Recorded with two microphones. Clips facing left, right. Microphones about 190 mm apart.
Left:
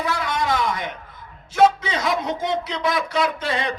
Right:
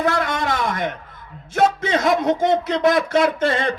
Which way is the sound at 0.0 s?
55° right (ahead or behind).